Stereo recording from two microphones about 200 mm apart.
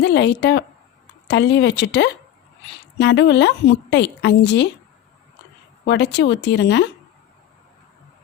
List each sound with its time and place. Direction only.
0.0 s a woman's voice: 60° left (ahead or behind)
5.8 s a woman's voice: 60° left (ahead or behind)